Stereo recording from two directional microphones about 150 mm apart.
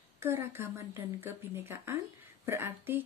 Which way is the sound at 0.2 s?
15° right (ahead or behind).